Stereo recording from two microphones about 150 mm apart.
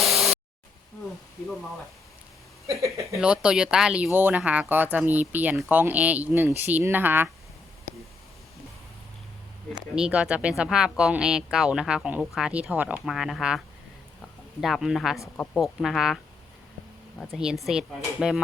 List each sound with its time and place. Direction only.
0.0 s a sound: centre (ahead or behind)
2.8 s speech: 20° right (ahead or behind)
3.2 s speech: 5° right (ahead or behind)
9.7 s speech: 5° right (ahead or behind)